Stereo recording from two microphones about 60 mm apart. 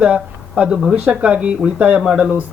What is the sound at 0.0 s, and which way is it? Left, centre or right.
Speech, centre.